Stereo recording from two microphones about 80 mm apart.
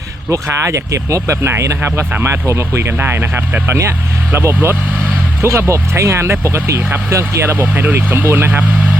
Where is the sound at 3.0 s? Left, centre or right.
Right.